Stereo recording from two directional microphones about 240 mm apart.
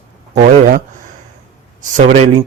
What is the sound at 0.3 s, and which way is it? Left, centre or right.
Speech, right.